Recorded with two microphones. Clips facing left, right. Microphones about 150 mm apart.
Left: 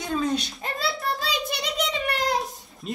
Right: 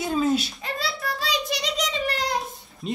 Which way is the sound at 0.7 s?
50° left (ahead or behind).